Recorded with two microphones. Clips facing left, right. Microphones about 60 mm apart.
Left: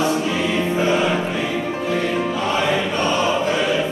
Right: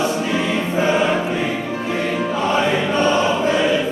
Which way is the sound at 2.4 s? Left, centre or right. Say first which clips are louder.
Right 4 dB; right.